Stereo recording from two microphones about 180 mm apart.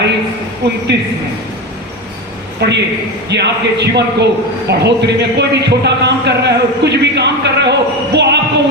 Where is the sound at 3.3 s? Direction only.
70° right (ahead or behind).